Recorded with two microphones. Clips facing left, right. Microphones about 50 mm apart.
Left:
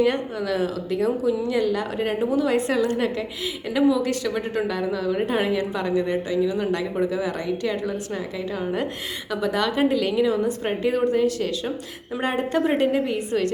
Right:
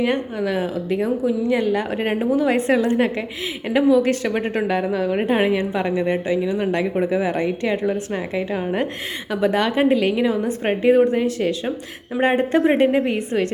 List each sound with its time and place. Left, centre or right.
0.0 s a woman's voice: right